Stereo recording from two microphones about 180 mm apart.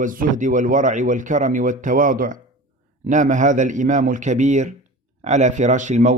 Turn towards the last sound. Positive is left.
turn(degrees=-40)  # may be behind; listen again after turning